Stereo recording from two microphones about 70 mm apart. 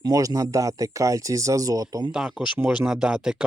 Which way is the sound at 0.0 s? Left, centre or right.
Right.